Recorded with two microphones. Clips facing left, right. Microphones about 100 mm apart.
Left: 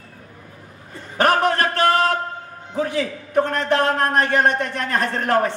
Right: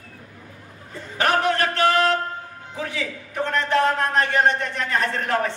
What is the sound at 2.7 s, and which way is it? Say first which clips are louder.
A man's voice: left 7 dB; 45° left (ahead or behind).